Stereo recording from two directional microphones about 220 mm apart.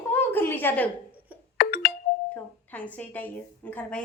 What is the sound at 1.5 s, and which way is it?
Doorbell, 45° left (ahead or behind).